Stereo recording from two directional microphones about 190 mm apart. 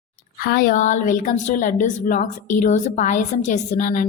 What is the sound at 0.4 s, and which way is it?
A woman's voice, 45° left (ahead or behind).